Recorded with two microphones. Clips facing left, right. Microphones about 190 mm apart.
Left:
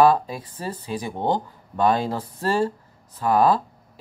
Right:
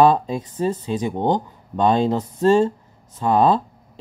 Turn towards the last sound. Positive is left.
turn(degrees=-25)  # may be behind; listen again after turning